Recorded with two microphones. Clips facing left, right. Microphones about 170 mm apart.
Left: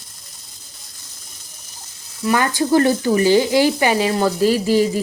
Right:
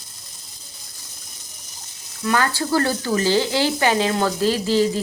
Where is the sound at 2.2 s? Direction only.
15° left (ahead or behind).